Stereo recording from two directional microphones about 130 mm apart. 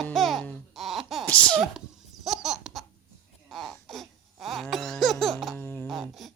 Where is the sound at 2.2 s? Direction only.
Centre (ahead or behind).